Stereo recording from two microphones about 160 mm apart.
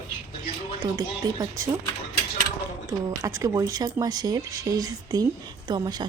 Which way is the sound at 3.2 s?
20° right (ahead or behind).